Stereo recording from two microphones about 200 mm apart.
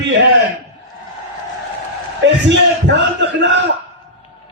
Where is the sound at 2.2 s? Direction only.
60° right (ahead or behind).